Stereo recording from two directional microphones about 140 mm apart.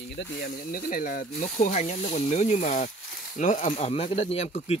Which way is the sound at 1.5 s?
60° left (ahead or behind).